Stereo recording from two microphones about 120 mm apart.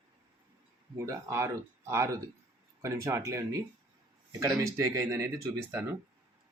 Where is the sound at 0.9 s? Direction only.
25° right (ahead or behind).